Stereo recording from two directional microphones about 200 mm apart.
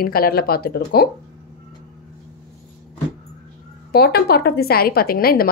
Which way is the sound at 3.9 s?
50° left (ahead or behind).